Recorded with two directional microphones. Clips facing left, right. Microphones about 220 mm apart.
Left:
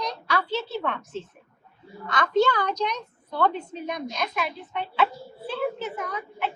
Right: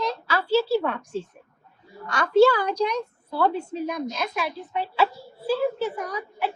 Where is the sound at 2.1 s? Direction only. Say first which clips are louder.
Right 5 dB; 10° right (ahead or behind).